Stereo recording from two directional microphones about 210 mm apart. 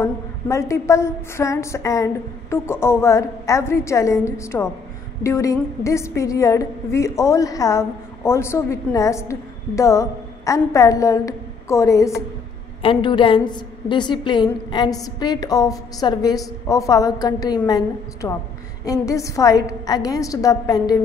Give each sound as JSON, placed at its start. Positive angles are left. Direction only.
{"t": 0.0, "sound": "a woman's voice", "side_deg": 15}